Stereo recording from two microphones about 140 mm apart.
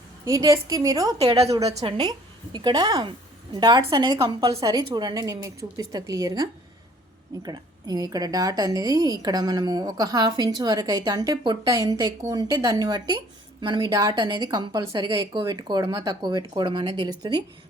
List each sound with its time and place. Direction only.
0.3 s a woman's voice: 25° right (ahead or behind)
1.7 s a woman's voice: 45° right (ahead or behind)
2.0 s a woman's voice: 30° right (ahead or behind)